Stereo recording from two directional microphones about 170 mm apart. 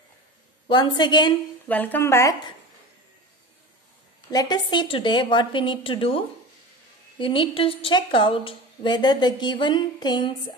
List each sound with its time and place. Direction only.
0.7 s a woman's voice: 25° left (ahead or behind)
1.7 s speech: 10° left (ahead or behind)
4.3 s a woman's voice: 25° left (ahead or behind)